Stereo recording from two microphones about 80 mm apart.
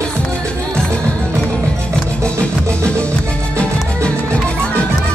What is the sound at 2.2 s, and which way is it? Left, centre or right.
Music, centre.